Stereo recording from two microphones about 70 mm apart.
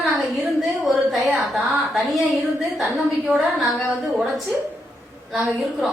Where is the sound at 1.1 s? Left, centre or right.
Centre.